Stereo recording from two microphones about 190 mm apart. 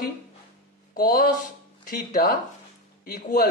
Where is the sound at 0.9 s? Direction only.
45° left (ahead or behind).